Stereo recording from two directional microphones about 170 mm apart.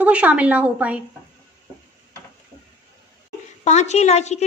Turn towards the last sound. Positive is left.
turn(degrees=40)  # may be behind; listen again after turning